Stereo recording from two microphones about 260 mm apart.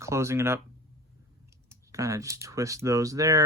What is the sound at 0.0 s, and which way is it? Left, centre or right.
Speech, centre.